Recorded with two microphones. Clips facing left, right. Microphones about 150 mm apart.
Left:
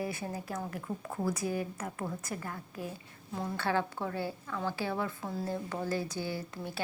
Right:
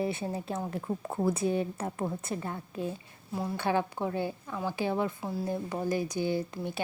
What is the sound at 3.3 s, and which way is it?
Speech, 15° right (ahead or behind).